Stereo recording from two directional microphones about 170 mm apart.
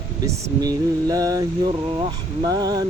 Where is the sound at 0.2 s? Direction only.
20° right (ahead or behind).